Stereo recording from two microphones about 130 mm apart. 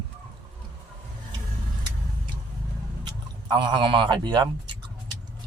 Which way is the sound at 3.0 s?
35° right (ahead or behind).